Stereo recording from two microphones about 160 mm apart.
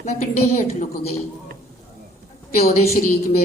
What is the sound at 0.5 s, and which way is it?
Speech, 45° left (ahead or behind).